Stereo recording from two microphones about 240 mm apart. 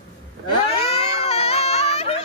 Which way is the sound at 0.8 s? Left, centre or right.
Left.